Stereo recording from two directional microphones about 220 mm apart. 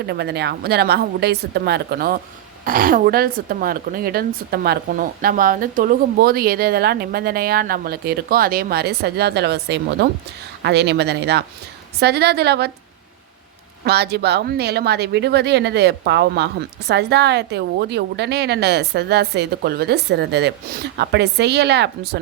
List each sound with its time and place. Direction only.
0.1 s a woman's voice: 50° right (ahead or behind)
13.8 s a woman's voice: 50° right (ahead or behind)